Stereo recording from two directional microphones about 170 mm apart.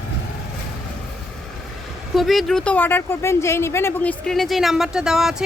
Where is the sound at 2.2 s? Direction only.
Centre (ahead or behind).